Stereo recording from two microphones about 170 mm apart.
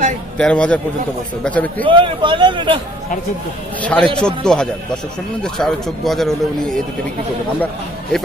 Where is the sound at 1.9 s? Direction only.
30° right (ahead or behind).